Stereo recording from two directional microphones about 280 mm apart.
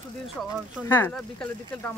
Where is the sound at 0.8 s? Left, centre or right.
Centre.